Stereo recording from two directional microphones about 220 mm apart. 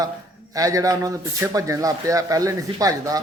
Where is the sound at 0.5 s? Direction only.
15° right (ahead or behind).